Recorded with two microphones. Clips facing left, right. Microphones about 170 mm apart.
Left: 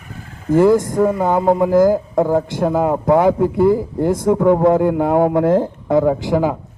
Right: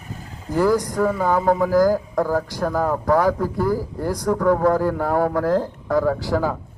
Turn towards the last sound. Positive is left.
turn(degrees=20)  # may be behind; listen again after turning